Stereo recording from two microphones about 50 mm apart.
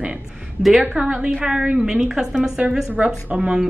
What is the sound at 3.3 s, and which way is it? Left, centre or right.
Speech, right.